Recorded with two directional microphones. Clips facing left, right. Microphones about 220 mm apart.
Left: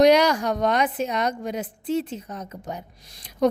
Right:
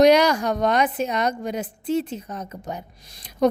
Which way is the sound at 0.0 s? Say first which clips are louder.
Right 1 dB; 45° right (ahead or behind).